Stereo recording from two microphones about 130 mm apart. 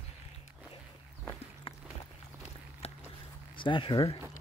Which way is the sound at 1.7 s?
45° left (ahead or behind).